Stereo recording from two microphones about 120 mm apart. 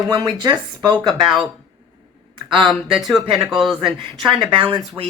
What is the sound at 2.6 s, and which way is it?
Speech, centre (ahead or behind).